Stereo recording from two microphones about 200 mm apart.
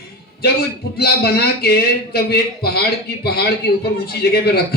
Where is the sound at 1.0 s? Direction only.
50° left (ahead or behind).